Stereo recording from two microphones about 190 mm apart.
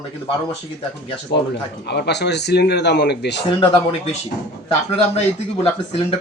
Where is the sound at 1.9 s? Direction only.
60° left (ahead or behind).